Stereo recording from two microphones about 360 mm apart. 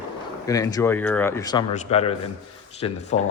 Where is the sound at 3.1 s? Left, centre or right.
Centre.